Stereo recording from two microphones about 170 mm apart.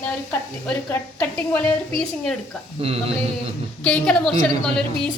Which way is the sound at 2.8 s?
35° right (ahead or behind).